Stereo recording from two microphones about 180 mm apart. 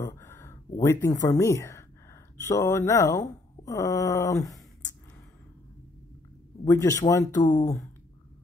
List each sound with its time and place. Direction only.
0.3 s a sound: 15° left (ahead or behind)
0.7 s speech: 15° left (ahead or behind)
6.6 s speech: 15° left (ahead or behind)